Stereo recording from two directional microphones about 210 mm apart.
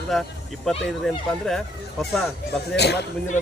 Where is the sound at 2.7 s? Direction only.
50° left (ahead or behind).